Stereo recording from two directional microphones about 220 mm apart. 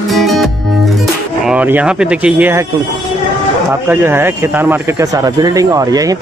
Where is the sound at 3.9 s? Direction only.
10° right (ahead or behind).